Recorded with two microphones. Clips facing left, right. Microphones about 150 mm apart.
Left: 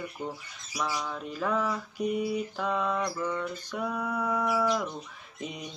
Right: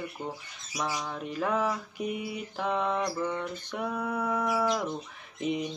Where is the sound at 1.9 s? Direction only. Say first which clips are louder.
Left 4 dB; 40° left (ahead or behind).